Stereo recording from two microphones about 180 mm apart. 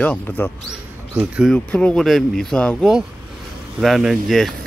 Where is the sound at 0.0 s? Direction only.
10° left (ahead or behind).